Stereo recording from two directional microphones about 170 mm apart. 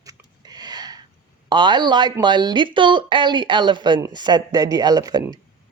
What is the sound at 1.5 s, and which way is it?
A woman's voice, 25° right (ahead or behind).